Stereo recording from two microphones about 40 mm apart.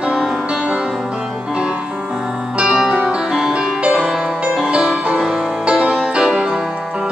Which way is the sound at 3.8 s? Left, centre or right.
Right.